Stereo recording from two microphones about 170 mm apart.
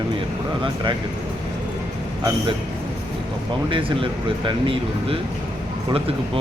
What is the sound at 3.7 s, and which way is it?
Speech, 30° right (ahead or behind).